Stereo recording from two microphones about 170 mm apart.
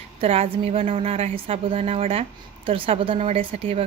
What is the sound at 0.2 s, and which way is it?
A woman's voice, 35° right (ahead or behind).